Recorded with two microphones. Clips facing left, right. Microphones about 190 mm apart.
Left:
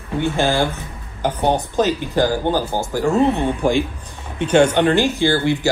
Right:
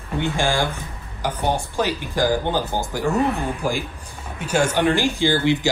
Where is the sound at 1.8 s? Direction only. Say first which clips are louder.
Left 5 dB; 15° right (ahead or behind).